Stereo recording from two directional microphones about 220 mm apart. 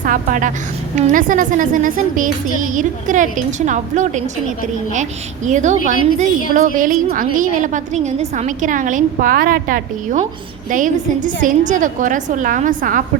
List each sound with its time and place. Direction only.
0.0 s a woman's voice: 35° right (ahead or behind)
5.5 s a woman's voice: 35° right (ahead or behind)